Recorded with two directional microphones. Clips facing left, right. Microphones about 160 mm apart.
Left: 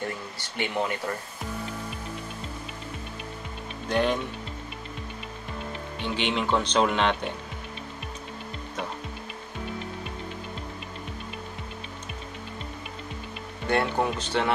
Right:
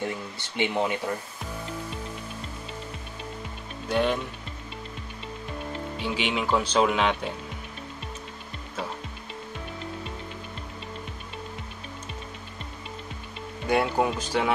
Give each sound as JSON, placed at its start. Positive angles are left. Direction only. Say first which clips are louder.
{"t": 0.6, "sound": "speech", "louder": "right 2 dB", "side_deg": -20}
{"t": 3.9, "sound": "speech", "louder": "even", "side_deg": 0}
{"t": 6.0, "sound": "speech", "louder": "left 1 dB", "side_deg": -5}
{"t": 13.7, "sound": "speech", "louder": "right 1 dB", "side_deg": -10}